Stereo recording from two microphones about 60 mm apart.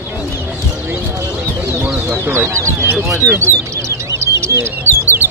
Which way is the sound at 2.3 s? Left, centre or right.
Right.